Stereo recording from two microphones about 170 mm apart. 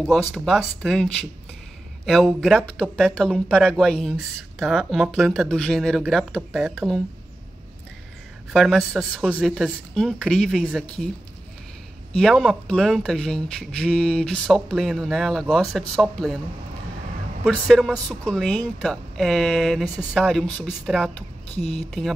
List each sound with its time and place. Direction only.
0.0 s speech: centre (ahead or behind)
3.3 s speech: 5° right (ahead or behind)
8.5 s speech: centre (ahead or behind)
12.2 s speech: centre (ahead or behind)
17.5 s speech: centre (ahead or behind)
21.5 s speech: 35° left (ahead or behind)